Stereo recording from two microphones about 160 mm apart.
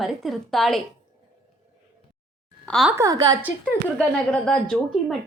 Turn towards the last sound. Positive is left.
turn(degrees=0)  # may be behind; listen again after turning